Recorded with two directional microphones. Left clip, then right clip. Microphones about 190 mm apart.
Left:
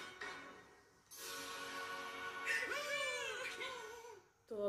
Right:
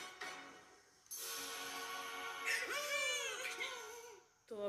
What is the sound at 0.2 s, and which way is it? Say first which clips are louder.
Music: even; 45° right (ahead or behind).